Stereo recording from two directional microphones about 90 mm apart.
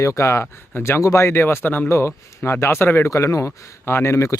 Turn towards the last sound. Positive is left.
turn(degrees=35)  # may be behind; listen again after turning